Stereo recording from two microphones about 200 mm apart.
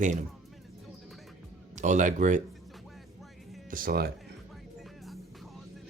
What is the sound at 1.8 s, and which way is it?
Speech, 40° right (ahead or behind).